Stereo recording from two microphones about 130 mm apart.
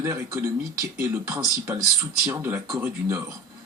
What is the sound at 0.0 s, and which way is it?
Speech, 20° right (ahead or behind).